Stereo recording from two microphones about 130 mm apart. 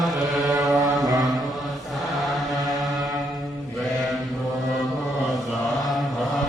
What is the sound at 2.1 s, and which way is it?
Chant, centre (ahead or behind).